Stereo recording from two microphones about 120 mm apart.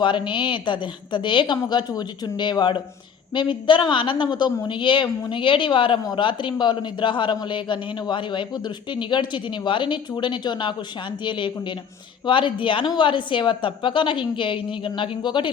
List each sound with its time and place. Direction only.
0.0 s a woman's voice: 40° left (ahead or behind)